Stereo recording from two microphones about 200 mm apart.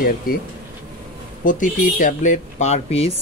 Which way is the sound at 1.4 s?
40° left (ahead or behind).